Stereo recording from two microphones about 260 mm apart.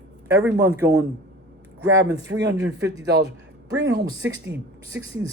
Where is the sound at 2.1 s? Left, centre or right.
Centre.